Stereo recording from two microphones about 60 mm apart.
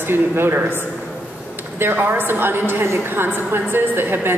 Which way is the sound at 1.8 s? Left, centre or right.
Right.